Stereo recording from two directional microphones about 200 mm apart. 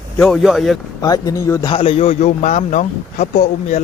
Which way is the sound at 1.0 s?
15° left (ahead or behind).